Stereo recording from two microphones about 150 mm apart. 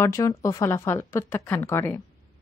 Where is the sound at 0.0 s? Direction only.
20° left (ahead or behind).